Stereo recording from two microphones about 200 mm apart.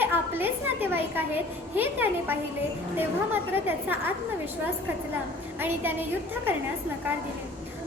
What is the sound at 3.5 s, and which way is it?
Speech, 10° right (ahead or behind).